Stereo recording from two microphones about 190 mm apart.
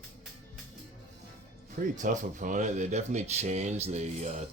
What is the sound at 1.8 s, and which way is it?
Speech, 40° right (ahead or behind).